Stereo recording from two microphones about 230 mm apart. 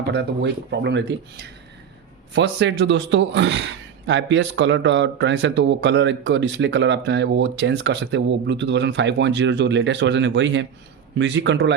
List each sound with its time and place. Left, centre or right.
0.1 s speech: right